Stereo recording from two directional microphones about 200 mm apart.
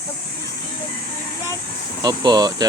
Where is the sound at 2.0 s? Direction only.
20° right (ahead or behind).